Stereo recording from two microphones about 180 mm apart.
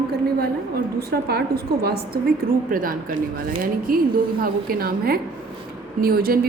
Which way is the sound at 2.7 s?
50° right (ahead or behind).